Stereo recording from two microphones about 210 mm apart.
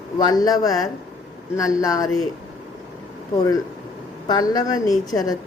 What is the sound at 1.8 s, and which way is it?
Speech, 15° left (ahead or behind).